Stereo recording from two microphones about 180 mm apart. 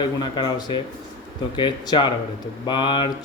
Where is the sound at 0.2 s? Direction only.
25° left (ahead or behind).